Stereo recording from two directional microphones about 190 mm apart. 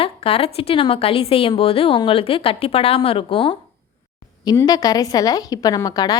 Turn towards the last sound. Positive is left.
turn(degrees=20)  # may be behind; listen again after turning